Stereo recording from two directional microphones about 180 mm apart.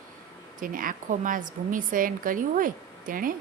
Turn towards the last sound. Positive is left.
turn(degrees=-50)  # may be behind; listen again after turning